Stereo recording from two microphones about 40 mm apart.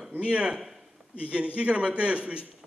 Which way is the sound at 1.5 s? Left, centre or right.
Right.